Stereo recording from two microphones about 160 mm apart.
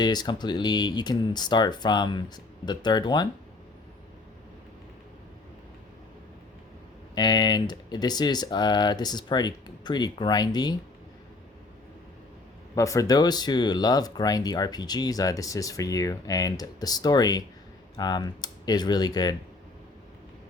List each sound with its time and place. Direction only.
0.0 s speech: 25° left (ahead or behind)
7.2 s speech: 25° left (ahead or behind)
12.7 s speech: 20° left (ahead or behind)